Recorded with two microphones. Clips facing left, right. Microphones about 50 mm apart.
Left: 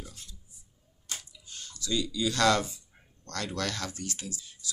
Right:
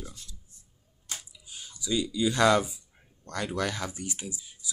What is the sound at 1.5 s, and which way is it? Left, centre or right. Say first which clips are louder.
Speech: right 2 dB; centre.